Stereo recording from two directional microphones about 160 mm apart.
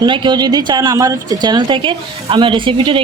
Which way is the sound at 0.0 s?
30° right (ahead or behind).